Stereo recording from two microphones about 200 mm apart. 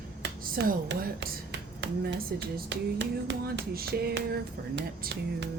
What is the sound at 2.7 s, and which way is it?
Speech, 60° right (ahead or behind).